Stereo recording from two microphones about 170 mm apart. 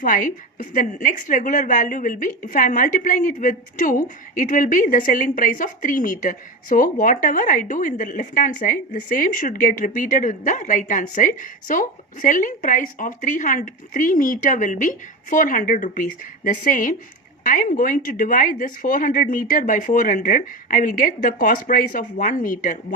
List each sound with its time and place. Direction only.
0.0 s a woman's voice: 55° left (ahead or behind)